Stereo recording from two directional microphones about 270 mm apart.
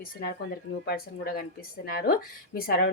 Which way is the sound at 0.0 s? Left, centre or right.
Left.